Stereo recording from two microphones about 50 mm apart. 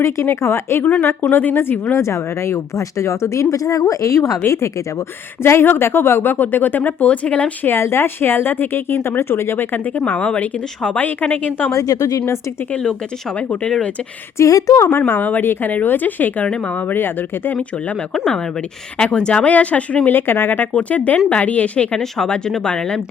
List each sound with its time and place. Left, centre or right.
0.0 s speech: left
1.3 s speech: left
1.5 s speech: left
2.0 s speech: left
5.4 s speech: left
7.6 s speech: left
9.7 s speech: left
12.7 s speech: centre
14.3 s speech: left
14.8 s speech: left
18.9 s speech: left
20.1 s speech: left
20.9 s speech: left
21.9 s speech: centre